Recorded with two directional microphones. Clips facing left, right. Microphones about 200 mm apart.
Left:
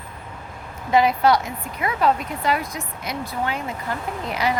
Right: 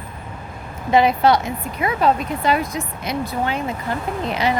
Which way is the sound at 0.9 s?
25° right (ahead or behind).